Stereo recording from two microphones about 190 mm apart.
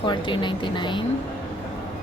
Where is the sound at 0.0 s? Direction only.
25° left (ahead or behind).